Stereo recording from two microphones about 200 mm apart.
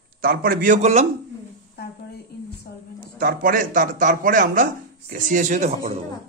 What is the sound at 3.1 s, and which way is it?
A man's voice, 45° right (ahead or behind).